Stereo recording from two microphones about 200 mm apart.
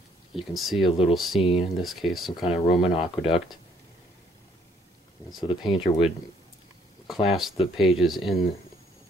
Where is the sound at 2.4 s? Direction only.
30° left (ahead or behind).